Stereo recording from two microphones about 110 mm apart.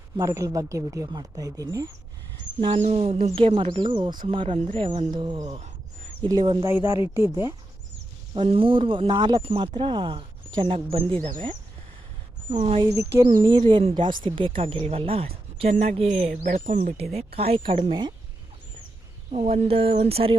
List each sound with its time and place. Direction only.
0.2 s speech: 30° right (ahead or behind)
2.8 s speech: 75° right (ahead or behind); by 6.7 s 50° right (ahead or behind)
6.7 s speech: 20° right (ahead or behind)
8.4 s speech: 55° right (ahead or behind)
12.5 s speech: 90° right
12.8 s speech: 25° right (ahead or behind)
13.2 s speech: 40° right (ahead or behind); by 16.9 s 85° right
17.2 s speech: 65° right (ahead or behind)
19.3 s speech: 75° right (ahead or behind)